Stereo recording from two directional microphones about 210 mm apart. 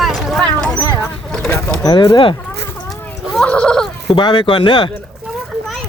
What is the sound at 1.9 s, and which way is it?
Speech, 20° left (ahead or behind).